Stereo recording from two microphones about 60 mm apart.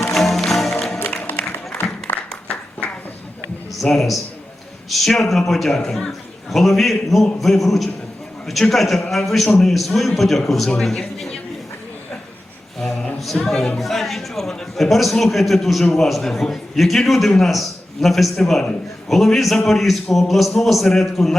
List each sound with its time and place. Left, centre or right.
0.1 s music: centre
0.9 s music: left
3.8 s a man's voice: centre
4.9 s a man's voice: centre
13.1 s music: centre
13.4 s a man's voice: centre